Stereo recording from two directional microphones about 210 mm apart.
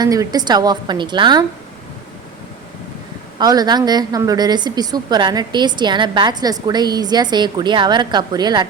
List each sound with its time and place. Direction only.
0.0 s a woman's voice: 20° right (ahead or behind)
3.3 s a woman's voice: 20° right (ahead or behind)